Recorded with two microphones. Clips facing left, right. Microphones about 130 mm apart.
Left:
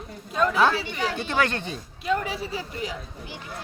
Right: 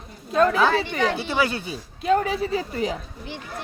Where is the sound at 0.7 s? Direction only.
55° right (ahead or behind).